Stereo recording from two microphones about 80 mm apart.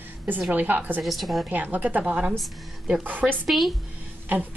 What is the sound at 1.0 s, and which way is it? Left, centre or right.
Speech, centre.